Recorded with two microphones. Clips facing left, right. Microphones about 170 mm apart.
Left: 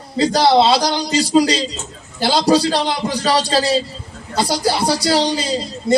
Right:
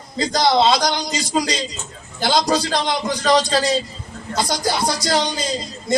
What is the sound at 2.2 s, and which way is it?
Speech, 35° left (ahead or behind).